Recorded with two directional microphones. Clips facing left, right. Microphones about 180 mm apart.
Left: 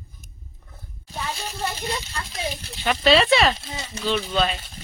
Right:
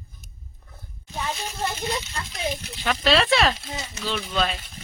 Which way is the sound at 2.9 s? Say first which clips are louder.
Left 3 dB; centre (ahead or behind).